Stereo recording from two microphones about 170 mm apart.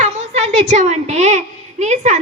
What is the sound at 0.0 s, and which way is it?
A woman's voice, 40° right (ahead or behind).